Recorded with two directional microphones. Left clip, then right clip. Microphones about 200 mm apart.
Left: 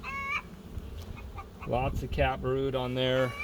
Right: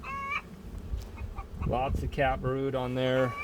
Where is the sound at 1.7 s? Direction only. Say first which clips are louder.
Even; 10° right (ahead or behind).